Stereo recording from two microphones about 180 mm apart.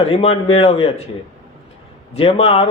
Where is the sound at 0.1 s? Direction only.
35° left (ahead or behind).